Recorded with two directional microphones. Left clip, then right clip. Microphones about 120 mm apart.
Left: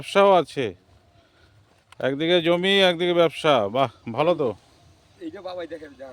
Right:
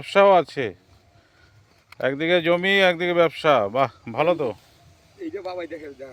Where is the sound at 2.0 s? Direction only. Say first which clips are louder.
Even; 50° left (ahead or behind).